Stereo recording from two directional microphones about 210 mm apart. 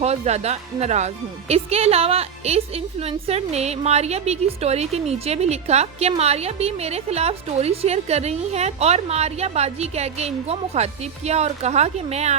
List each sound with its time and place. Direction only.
0.0 s speech: 30° right (ahead or behind)